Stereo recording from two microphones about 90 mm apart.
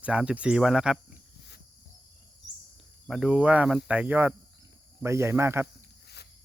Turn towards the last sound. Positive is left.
turn(degrees=-25)  # may be behind; listen again after turning